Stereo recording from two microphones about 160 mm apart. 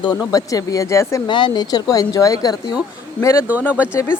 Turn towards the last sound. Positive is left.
turn(degrees=15)  # may be behind; listen again after turning